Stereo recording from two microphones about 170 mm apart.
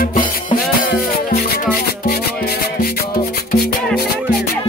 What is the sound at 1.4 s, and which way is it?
Music, 60° left (ahead or behind).